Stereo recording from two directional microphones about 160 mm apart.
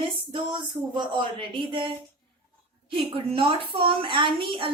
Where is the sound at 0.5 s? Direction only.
30° right (ahead or behind).